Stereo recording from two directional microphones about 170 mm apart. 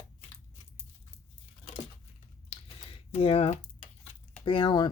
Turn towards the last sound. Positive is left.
turn(degrees=25)  # may be behind; listen again after turning